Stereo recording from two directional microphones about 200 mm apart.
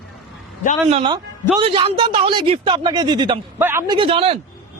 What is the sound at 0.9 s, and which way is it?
Speech, 25° right (ahead or behind).